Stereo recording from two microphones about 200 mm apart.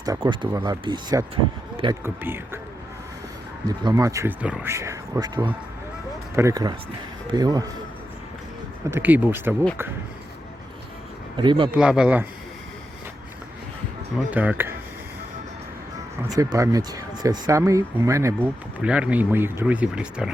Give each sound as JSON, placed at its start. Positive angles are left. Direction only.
{"t": 0.0, "sound": "speech", "side_deg": -20}
{"t": 2.0, "sound": "speech", "side_deg": -10}
{"t": 3.7, "sound": "speech", "side_deg": -20}
{"t": 8.9, "sound": "speech", "side_deg": -10}
{"t": 11.3, "sound": "speech", "side_deg": -25}
{"t": 11.7, "sound": "speech", "side_deg": -5}
{"t": 14.3, "sound": "speech", "side_deg": -10}
{"t": 16.3, "sound": "speech", "side_deg": -15}